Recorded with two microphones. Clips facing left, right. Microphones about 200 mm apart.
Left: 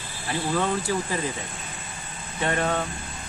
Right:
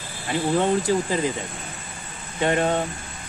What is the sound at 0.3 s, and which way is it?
Speech, 20° right (ahead or behind).